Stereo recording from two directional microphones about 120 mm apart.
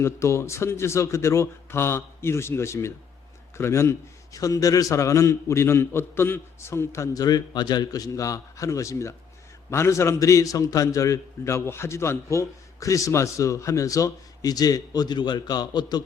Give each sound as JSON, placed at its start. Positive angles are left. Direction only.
{"t": 0.0, "sound": "a man's voice", "side_deg": 25}